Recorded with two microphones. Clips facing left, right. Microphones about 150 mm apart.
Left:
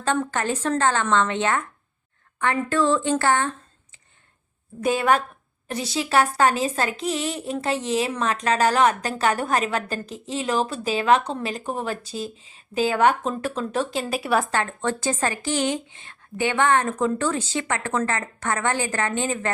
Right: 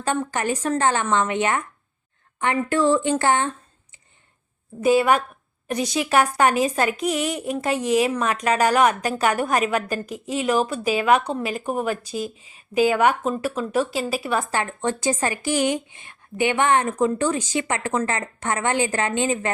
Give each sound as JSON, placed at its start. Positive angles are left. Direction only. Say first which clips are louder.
{"t": 0.0, "sound": "speech", "louder": "even", "side_deg": -10}
{"t": 4.8, "sound": "speech", "louder": "right 3 dB", "side_deg": -10}
{"t": 14.5, "sound": "speech", "louder": "even", "side_deg": -15}